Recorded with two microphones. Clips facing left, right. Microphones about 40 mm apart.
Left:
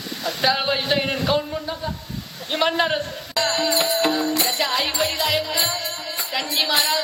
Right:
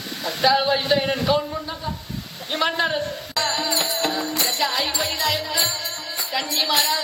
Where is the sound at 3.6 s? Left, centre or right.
Left.